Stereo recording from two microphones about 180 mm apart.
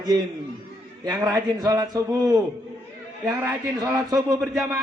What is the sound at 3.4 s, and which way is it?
Speech, 20° right (ahead or behind).